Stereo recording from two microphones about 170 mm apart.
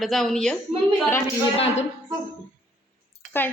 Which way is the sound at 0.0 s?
Centre (ahead or behind).